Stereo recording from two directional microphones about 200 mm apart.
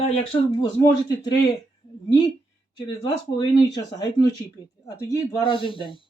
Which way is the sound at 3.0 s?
20° left (ahead or behind).